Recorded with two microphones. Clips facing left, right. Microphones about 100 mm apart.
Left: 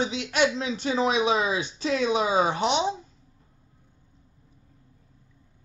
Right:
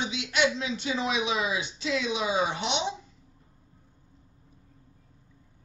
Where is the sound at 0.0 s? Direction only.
40° left (ahead or behind).